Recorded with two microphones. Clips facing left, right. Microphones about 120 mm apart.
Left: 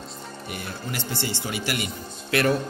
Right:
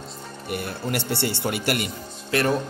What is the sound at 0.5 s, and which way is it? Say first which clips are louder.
Speech: right 7 dB; 60° right (ahead or behind).